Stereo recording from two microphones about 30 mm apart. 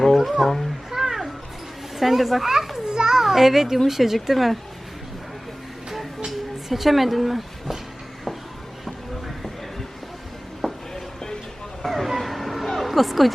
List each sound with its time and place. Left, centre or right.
0.3 s a child's voice: centre
0.6 s a sound: centre
2.0 s a child's voice: centre
2.8 s children playing: right
3.2 s a child's voice: centre
5.9 s music: centre
6.2 s speech: centre
10.9 s music: left
11.8 s vehicle: centre
12.0 s a sound: centre